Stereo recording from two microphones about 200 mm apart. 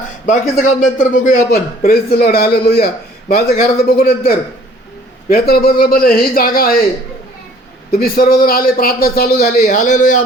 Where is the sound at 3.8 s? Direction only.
50° left (ahead or behind).